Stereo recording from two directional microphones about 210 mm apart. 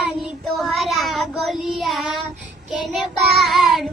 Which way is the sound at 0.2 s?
Centre (ahead or behind).